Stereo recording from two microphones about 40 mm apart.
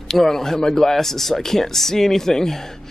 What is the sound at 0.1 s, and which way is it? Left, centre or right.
Speech, centre.